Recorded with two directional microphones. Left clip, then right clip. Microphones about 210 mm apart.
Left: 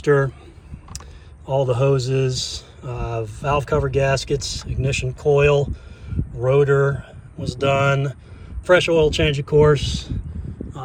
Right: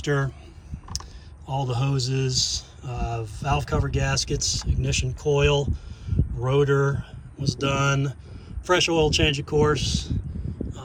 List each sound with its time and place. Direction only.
0.0 s speech: 5° right (ahead or behind)
1.5 s speech: 5° right (ahead or behind)